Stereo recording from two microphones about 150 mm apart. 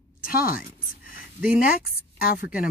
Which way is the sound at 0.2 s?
75° left (ahead or behind).